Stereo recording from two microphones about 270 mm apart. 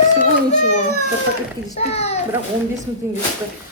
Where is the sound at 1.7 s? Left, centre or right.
Left.